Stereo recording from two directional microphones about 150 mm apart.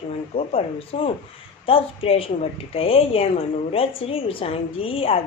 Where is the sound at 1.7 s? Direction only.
40° left (ahead or behind).